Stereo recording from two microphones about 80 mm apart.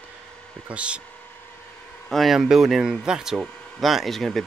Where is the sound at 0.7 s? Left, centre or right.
Centre.